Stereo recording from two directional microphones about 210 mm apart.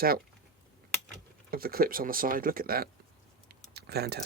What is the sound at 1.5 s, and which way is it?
Speech, 45° right (ahead or behind).